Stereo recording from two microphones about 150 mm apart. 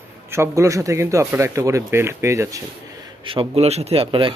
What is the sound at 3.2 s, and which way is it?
A man's voice, 35° right (ahead or behind).